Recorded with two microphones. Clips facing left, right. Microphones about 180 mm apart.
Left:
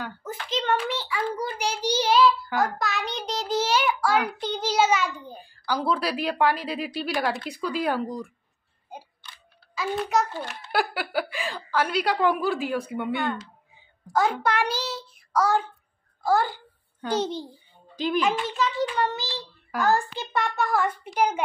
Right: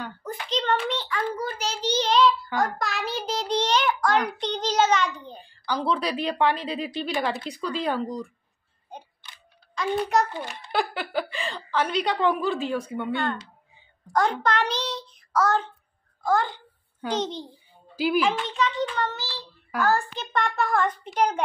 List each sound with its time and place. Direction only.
0.0 s hands: 5° left (ahead or behind)
0.5 s a child's voice: 5° left (ahead or behind)
8.9 s single-lens reflex camera: 5° left (ahead or behind)
9.8 s a child's voice: 5° left (ahead or behind)
17.9 s speech: 10° right (ahead or behind)
18.4 s a child's voice: 5° left (ahead or behind)
20.3 s a child's voice: centre (ahead or behind)